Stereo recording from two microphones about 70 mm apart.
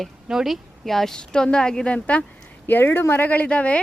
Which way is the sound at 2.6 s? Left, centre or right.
Left.